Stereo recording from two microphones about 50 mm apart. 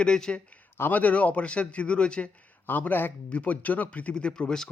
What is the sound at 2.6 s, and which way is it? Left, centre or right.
Speech, left.